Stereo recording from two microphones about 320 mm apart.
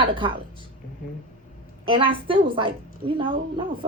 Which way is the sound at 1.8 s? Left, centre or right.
Centre.